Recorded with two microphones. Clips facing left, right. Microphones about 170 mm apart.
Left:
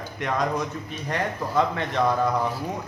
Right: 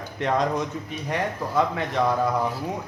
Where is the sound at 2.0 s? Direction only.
Centre (ahead or behind).